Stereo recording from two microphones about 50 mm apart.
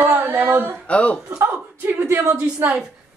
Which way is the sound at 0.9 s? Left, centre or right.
Left.